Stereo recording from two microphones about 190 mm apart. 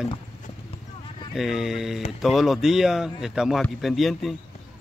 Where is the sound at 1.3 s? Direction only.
Centre (ahead or behind).